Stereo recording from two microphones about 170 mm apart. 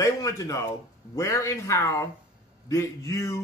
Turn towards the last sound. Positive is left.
turn(degrees=15)  # may be behind; listen again after turning